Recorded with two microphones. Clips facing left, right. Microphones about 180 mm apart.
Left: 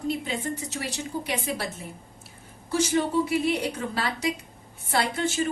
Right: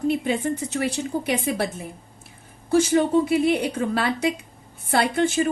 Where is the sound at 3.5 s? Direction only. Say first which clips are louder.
Right 5 dB; 60° right (ahead or behind).